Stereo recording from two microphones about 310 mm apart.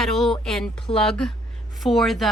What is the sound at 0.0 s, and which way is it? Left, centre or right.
A woman's voice, centre.